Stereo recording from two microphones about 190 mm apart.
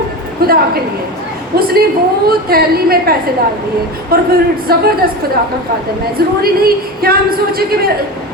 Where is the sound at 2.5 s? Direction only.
55° right (ahead or behind).